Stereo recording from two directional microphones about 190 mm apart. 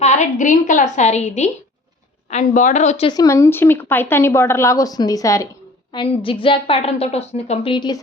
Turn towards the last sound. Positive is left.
turn(degrees=25)  # may be behind; listen again after turning